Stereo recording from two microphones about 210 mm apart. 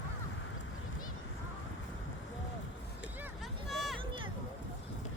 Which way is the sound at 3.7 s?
Centre (ahead or behind).